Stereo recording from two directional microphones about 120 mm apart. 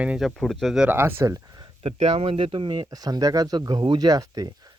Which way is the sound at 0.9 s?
20° right (ahead or behind).